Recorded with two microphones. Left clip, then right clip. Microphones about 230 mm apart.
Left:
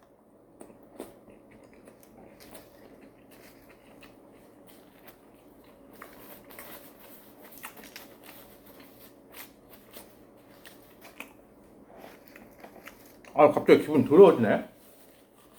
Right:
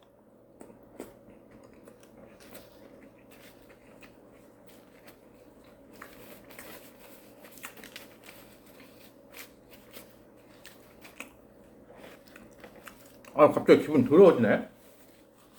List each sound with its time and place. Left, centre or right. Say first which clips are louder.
1.0 s vehicle: left 1 dB; centre
6.0 s a sound: even; centre
12.8 s speech: left 1 dB; centre